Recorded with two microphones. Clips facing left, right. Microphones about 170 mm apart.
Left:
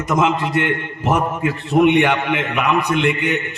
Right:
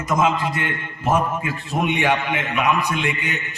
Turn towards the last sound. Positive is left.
turn(degrees=60)  # may be behind; listen again after turning